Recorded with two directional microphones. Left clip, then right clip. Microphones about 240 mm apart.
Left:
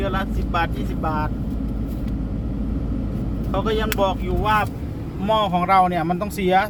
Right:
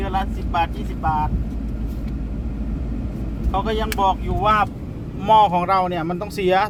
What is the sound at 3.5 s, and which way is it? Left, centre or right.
Speech, centre.